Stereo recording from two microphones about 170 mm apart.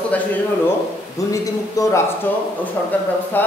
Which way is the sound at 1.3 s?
20° left (ahead or behind).